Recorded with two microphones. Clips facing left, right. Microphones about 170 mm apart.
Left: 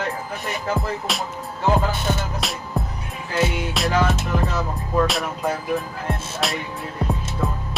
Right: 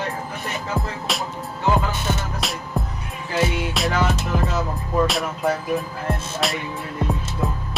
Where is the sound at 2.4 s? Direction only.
Centre (ahead or behind).